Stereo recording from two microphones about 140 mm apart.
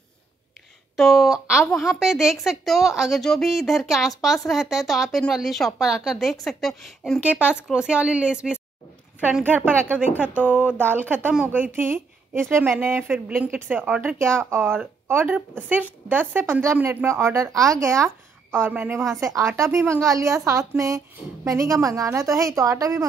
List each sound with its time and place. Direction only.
0.9 s speech: centre (ahead or behind); by 23.0 s 25° right (ahead or behind)